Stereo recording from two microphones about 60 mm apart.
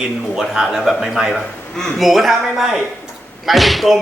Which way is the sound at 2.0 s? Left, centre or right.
Centre.